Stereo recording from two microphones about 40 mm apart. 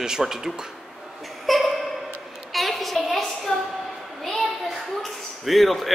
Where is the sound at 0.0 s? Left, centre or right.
Centre.